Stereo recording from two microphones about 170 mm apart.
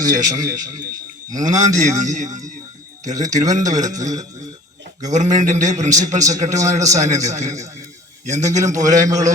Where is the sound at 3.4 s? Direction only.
20° right (ahead or behind).